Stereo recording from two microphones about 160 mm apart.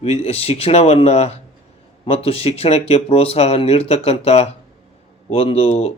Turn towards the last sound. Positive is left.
turn(degrees=40)  # may be behind; listen again after turning